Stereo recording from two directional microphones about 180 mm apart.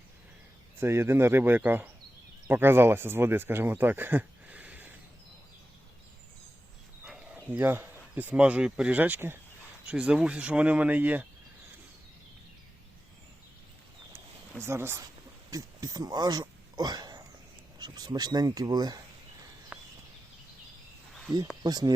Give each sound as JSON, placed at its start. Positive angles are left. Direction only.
{"t": 0.8, "sound": "speech", "side_deg": -15}
{"t": 7.0, "sound": "speech", "side_deg": -5}
{"t": 14.1, "sound": "a sound", "side_deg": -15}
{"t": 15.4, "sound": "speech", "side_deg": -20}
{"t": 19.7, "sound": "a sound", "side_deg": -5}
{"t": 21.6, "sound": "speech", "side_deg": -20}